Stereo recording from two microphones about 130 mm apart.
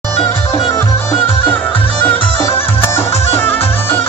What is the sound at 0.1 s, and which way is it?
Music, 15° left (ahead or behind).